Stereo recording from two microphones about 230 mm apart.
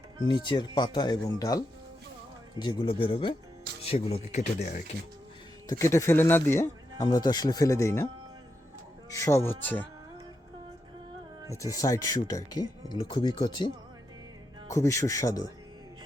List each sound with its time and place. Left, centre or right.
0.3 s speech: centre
5.6 s speech: centre
9.0 s speech: centre
11.5 s speech: centre
14.7 s speech: centre